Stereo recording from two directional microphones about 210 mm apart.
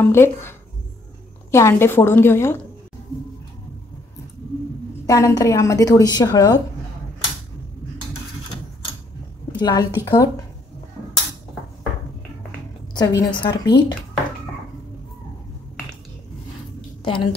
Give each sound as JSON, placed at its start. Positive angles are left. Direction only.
{"t": 0.0, "sound": "a woman's voice", "side_deg": 10}
{"t": 5.0, "sound": "a woman's voice", "side_deg": 15}
{"t": 9.6, "sound": "a woman's voice", "side_deg": 15}
{"t": 12.9, "sound": "a woman's voice", "side_deg": 20}
{"t": 17.0, "sound": "a woman's voice", "side_deg": 25}